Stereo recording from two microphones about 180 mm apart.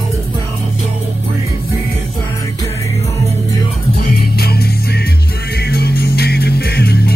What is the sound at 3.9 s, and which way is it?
Music, 60° left (ahead or behind).